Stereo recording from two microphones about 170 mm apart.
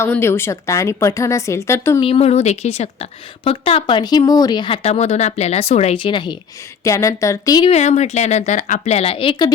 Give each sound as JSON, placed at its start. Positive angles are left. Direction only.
{"t": 0.0, "sound": "a woman's voice", "side_deg": 15}
{"t": 2.0, "sound": "speech", "side_deg": 35}
{"t": 6.8, "sound": "speech", "side_deg": 20}
{"t": 7.6, "sound": "speech", "side_deg": 40}